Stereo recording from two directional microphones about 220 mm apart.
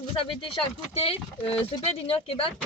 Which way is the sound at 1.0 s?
25° left (ahead or behind).